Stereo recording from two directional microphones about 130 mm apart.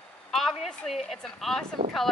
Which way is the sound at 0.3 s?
Centre (ahead or behind).